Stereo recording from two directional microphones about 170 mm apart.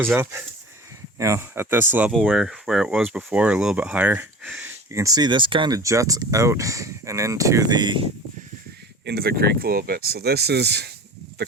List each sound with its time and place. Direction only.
0.2 s speech: 15° right (ahead or behind)
4.9 s speech: 20° right (ahead or behind)
9.0 s speech: 65° right (ahead or behind)